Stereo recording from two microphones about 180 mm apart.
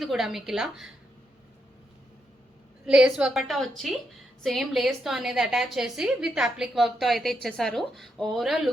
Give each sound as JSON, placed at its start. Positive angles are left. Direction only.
{"t": 0.0, "sound": "a woman's voice", "side_deg": 0}
{"t": 2.8, "sound": "a woman's voice", "side_deg": -5}